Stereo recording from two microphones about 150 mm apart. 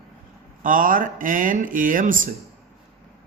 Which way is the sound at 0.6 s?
65° right (ahead or behind).